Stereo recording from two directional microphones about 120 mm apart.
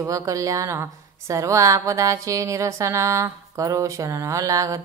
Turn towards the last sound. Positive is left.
turn(degrees=-25)  # may be behind; listen again after turning